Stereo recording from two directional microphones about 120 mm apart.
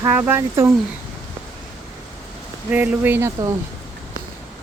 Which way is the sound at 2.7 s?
15° right (ahead or behind).